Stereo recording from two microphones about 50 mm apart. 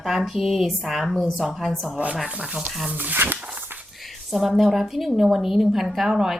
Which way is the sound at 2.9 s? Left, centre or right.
Right.